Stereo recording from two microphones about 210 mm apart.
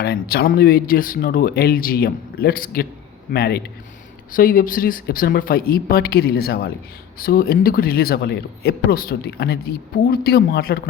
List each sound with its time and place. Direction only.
0.0 s speech: 50° left (ahead or behind)